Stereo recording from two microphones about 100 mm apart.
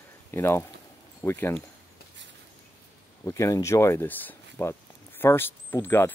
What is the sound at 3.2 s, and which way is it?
Speech, 30° left (ahead or behind).